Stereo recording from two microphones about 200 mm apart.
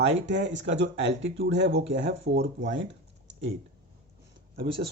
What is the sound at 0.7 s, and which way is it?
Speech, 65° right (ahead or behind).